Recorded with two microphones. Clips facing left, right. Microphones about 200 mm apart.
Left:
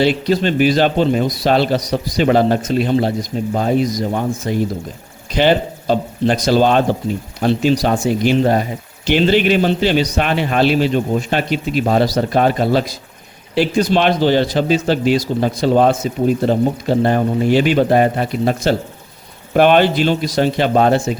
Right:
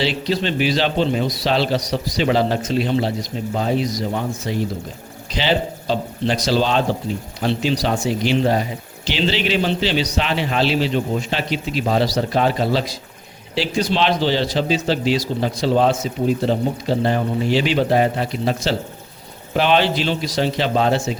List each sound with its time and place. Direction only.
0.0 s a man's voice: 50° left (ahead or behind)